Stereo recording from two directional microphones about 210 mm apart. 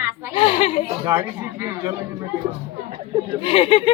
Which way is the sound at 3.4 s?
25° left (ahead or behind).